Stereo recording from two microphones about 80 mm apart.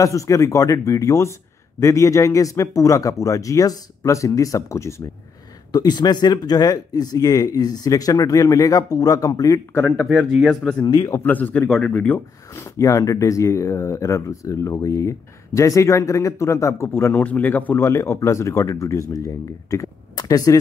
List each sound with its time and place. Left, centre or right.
0.0 s speech: left
5.7 s speech: left
10.5 s speech: centre
10.8 s speech: left
11.1 s speech: left
12.5 s speech: left
17.8 s speech: left
20.2 s speech: left